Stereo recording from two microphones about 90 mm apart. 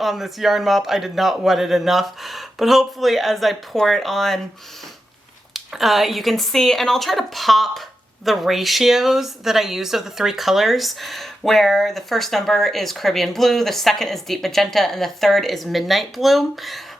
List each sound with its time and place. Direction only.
0.0 s speech: centre (ahead or behind)
5.5 s speech: centre (ahead or behind)